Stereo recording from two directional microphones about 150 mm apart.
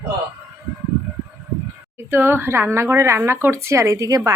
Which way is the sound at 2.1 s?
15° right (ahead or behind).